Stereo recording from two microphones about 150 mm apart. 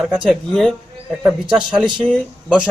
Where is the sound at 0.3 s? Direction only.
5° left (ahead or behind).